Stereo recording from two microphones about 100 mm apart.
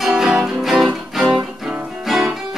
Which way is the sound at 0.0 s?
5° right (ahead or behind).